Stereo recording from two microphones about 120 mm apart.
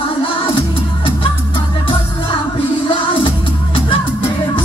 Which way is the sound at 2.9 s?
45° left (ahead or behind).